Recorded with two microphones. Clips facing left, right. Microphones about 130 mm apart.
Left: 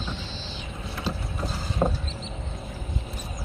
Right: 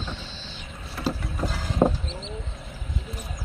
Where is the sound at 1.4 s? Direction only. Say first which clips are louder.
Right 3 dB; 90° right.